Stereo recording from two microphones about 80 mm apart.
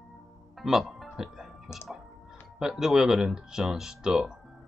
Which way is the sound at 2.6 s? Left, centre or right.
Centre.